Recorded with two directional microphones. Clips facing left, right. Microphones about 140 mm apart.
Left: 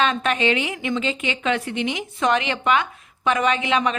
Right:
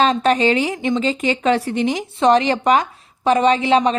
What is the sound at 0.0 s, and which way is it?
A woman's voice, 35° right (ahead or behind).